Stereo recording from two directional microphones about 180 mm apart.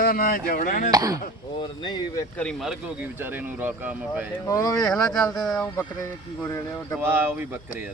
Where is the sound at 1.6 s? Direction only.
25° left (ahead or behind).